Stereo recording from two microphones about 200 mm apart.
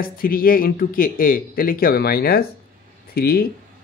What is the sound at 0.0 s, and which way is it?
Speech, 45° left (ahead or behind).